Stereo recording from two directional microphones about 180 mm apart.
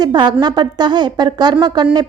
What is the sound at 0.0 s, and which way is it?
A woman's voice, 25° right (ahead or behind).